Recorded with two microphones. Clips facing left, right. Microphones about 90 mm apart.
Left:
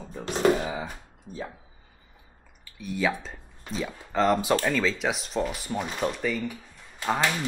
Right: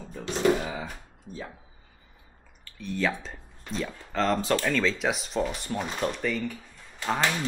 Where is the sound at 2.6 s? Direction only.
10° left (ahead or behind).